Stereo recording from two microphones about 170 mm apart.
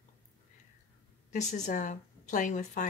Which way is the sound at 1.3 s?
45° left (ahead or behind).